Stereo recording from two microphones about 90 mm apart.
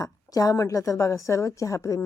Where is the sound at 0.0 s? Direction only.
45° left (ahead or behind).